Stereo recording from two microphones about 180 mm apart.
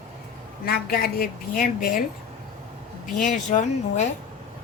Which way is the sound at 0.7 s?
55° left (ahead or behind).